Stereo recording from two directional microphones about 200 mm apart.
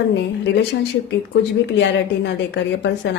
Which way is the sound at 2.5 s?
60° left (ahead or behind).